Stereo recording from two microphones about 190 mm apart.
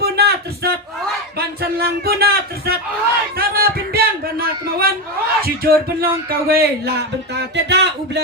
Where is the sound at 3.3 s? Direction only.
55° right (ahead or behind).